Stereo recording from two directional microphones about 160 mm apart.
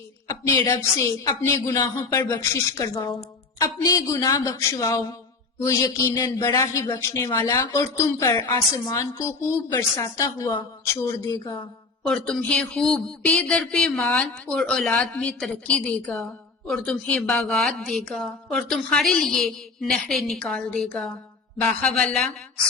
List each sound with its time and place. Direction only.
0.3 s speech: 20° left (ahead or behind)
12.0 s a woman's voice: 5° left (ahead or behind)